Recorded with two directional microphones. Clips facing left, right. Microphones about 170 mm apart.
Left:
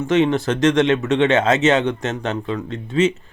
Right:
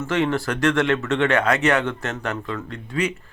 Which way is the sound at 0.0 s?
20° left (ahead or behind).